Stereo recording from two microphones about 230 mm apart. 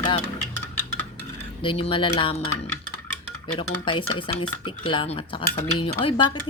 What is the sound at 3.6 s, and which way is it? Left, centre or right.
Cutlery, left.